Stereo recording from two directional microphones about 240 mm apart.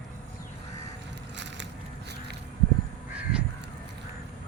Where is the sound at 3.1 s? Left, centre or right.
Centre.